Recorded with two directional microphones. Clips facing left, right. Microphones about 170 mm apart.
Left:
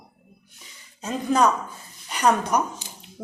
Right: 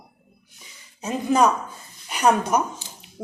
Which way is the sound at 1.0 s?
10° right (ahead or behind).